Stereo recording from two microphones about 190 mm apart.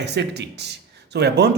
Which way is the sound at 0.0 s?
65° right (ahead or behind).